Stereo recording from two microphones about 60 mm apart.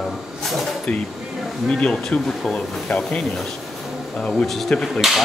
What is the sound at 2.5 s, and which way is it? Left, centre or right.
Speech, centre.